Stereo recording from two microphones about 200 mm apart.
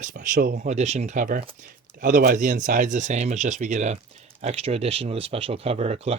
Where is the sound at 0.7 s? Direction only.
35° right (ahead or behind).